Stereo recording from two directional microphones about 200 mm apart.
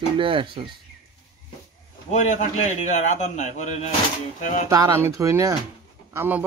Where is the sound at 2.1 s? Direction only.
35° left (ahead or behind).